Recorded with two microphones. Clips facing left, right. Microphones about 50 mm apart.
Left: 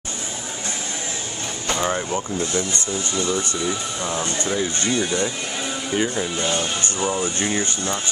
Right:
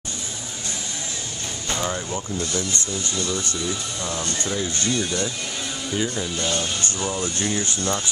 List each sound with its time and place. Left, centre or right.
1.7 s speech: left